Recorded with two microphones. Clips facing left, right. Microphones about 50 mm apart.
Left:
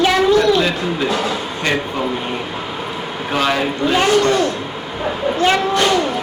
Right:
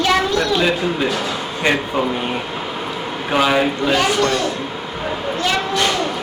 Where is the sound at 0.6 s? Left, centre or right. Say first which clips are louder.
Even; centre.